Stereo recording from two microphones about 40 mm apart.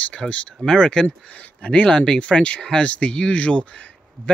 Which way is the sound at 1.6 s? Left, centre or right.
Left.